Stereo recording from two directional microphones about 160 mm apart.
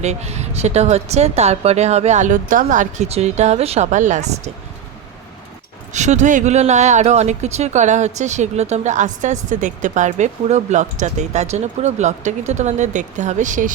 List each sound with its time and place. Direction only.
0.0 s speech: 45° right (ahead or behind)
5.9 s speech: 45° right (ahead or behind)